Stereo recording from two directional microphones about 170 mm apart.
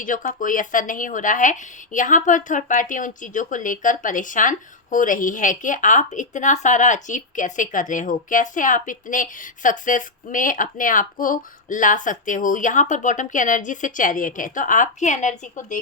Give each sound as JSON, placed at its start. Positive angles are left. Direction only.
{"t": 0.0, "sound": "speech", "side_deg": 50}